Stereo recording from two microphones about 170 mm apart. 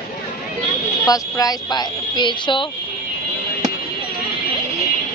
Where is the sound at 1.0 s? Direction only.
20° left (ahead or behind).